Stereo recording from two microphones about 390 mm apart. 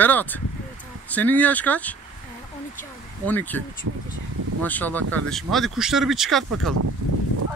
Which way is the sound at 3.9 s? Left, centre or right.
Right.